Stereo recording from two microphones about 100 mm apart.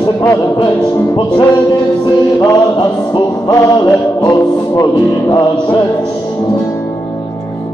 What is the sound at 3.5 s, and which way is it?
Music, 35° left (ahead or behind).